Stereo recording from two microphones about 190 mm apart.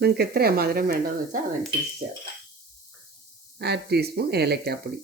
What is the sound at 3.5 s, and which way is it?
Speech, 60° right (ahead or behind).